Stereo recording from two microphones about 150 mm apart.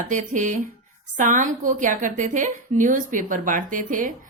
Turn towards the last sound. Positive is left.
turn(degrees=-60)  # may be behind; listen again after turning